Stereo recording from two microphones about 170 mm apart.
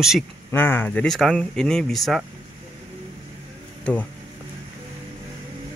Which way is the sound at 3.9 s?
5° left (ahead or behind).